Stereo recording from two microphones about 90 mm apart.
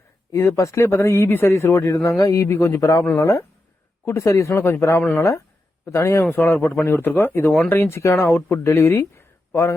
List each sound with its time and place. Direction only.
0.3 s a man's voice: 30° left (ahead or behind)